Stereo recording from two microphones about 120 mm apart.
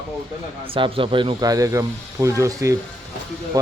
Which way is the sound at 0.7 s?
50° right (ahead or behind).